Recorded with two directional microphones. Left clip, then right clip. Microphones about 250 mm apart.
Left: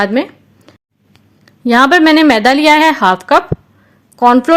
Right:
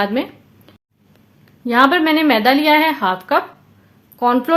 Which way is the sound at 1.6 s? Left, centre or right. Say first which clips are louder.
Left 5 dB; left.